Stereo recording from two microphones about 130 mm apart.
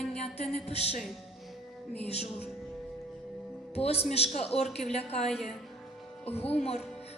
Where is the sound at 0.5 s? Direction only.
55° left (ahead or behind).